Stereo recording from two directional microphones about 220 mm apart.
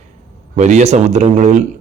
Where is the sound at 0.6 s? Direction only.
30° right (ahead or behind).